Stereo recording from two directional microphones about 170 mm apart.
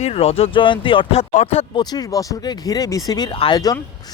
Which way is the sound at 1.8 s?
25° left (ahead or behind).